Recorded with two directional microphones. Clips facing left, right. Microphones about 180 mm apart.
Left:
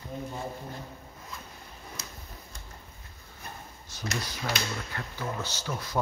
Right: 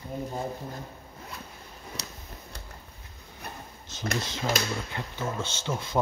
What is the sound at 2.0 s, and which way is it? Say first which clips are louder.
Tick-tock: right 3 dB; 70° right (ahead or behind).